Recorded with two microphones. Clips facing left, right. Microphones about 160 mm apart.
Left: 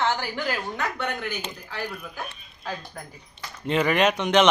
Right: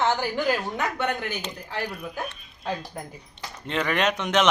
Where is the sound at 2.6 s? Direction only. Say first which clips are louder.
Right 4 dB; 25° right (ahead or behind).